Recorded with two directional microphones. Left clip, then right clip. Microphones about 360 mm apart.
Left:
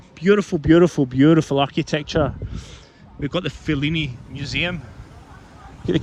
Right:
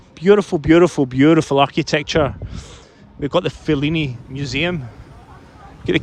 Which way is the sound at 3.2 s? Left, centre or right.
Centre.